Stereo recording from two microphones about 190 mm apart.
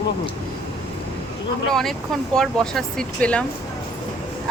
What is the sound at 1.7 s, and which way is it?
Speech, centre (ahead or behind).